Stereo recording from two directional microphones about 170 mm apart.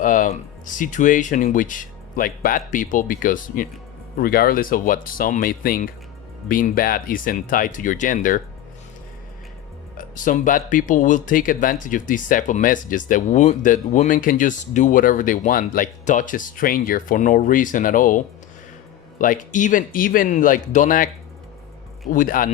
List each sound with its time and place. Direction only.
0.0 s speech: 50° left (ahead or behind)
10.0 s speech: 50° left (ahead or behind)
19.2 s speech: 50° left (ahead or behind)
22.1 s speech: 55° left (ahead or behind)